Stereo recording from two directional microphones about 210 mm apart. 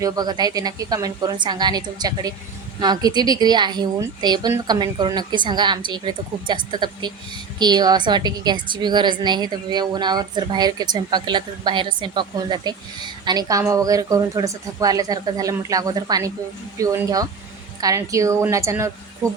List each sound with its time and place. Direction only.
0.0 s a woman's voice: 20° right (ahead or behind)